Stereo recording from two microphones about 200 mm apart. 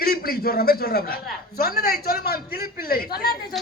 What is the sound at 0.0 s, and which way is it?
Speech, 50° left (ahead or behind).